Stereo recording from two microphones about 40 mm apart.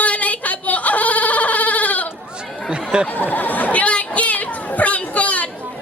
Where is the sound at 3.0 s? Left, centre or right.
Left.